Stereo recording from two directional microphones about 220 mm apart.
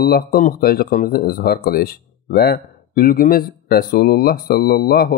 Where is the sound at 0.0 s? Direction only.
45° left (ahead or behind).